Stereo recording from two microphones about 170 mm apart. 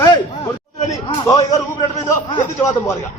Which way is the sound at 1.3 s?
20° left (ahead or behind).